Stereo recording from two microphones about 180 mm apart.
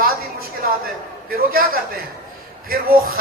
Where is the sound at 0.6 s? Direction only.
55° right (ahead or behind).